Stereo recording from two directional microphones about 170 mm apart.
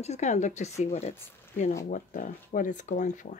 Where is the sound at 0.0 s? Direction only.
40° left (ahead or behind).